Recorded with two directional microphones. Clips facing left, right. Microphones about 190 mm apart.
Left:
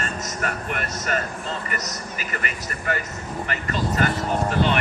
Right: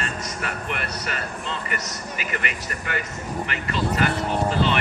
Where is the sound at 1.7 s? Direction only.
40° left (ahead or behind).